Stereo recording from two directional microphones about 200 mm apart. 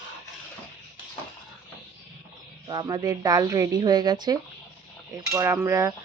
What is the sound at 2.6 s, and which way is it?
Speech, 20° right (ahead or behind).